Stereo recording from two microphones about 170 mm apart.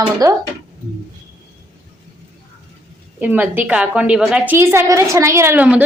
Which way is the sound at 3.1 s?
10° right (ahead or behind).